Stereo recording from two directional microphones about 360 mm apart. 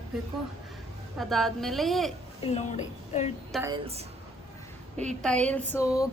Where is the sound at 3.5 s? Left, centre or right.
Centre.